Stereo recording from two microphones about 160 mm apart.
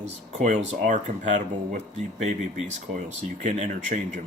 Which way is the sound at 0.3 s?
50° right (ahead or behind).